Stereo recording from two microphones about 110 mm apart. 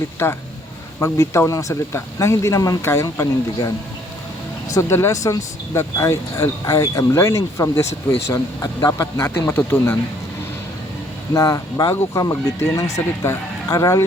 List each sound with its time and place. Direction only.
0.2 s speech: 25° left (ahead or behind)
4.7 s speech: 25° left (ahead or behind)
11.3 s speech: 30° left (ahead or behind)